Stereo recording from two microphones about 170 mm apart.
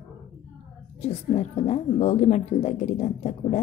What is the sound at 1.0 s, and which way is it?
Speech, 40° left (ahead or behind).